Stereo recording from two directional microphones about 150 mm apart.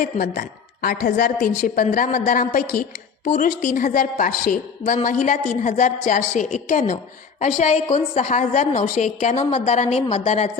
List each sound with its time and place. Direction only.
0.0 s a woman's voice: 80° left; by 10.5 s 45° left (ahead or behind)